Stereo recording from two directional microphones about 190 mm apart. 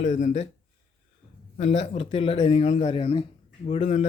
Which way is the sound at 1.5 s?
35° left (ahead or behind).